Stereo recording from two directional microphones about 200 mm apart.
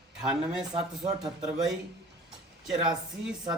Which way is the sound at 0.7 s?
30° right (ahead or behind).